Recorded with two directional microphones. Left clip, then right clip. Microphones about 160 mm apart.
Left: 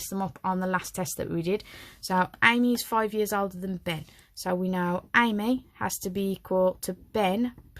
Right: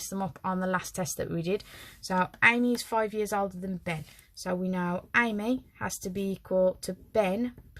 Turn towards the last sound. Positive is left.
turn(degrees=30)  # may be behind; listen again after turning